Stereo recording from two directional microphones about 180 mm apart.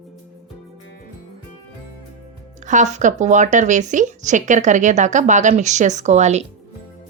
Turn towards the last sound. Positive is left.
turn(degrees=-40)  # may be behind; listen again after turning